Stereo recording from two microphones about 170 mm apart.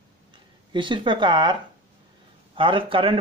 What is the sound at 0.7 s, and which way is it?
Speech, 30° right (ahead or behind).